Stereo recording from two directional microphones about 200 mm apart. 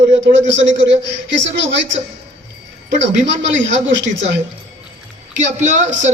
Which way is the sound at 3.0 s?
65° right (ahead or behind).